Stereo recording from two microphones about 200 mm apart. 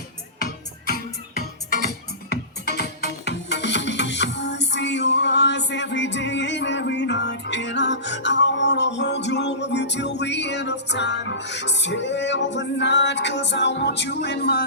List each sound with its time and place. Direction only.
3.2 s music: 60° left (ahead or behind)